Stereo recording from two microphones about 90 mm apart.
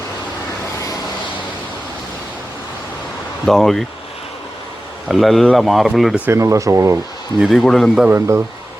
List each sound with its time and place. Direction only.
3.4 s a man's voice: 5° left (ahead or behind)
5.0 s a man's voice: centre (ahead or behind)
6.3 s speech: 35° right (ahead or behind)
7.3 s a man's voice: centre (ahead or behind)
8.1 s speech: 25° right (ahead or behind)